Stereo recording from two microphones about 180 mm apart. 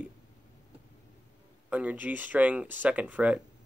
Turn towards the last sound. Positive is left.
turn(degrees=-5)  # may be behind; listen again after turning